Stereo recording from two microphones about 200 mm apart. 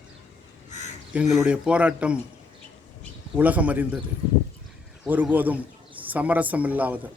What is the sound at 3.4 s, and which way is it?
Speech, 5° right (ahead or behind).